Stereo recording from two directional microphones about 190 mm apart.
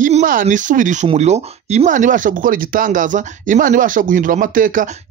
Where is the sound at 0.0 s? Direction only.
45° right (ahead or behind).